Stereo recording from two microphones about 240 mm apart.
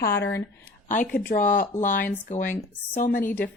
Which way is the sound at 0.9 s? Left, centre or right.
Left.